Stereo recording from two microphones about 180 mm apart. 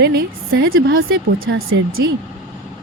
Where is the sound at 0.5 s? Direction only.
70° right (ahead or behind).